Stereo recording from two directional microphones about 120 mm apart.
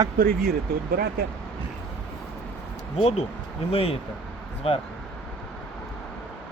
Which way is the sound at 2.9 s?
65° left (ahead or behind).